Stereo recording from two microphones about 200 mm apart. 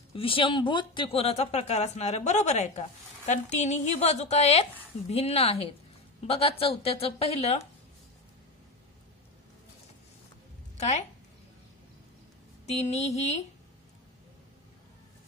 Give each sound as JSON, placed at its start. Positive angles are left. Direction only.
{"t": 0.1, "sound": "a woman's voice", "side_deg": 25}
{"t": 10.8, "sound": "speech", "side_deg": 35}
{"t": 12.6, "sound": "a woman's voice", "side_deg": 30}